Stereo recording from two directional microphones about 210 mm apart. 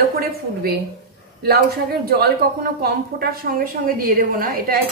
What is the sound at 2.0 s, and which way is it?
A woman's voice, 45° right (ahead or behind).